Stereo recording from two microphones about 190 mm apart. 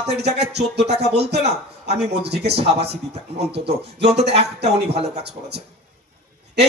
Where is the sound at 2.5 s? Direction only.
30° right (ahead or behind).